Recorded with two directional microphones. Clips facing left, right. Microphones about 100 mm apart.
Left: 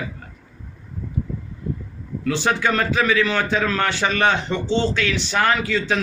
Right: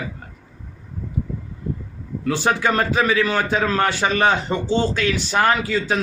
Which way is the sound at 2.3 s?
40° right (ahead or behind).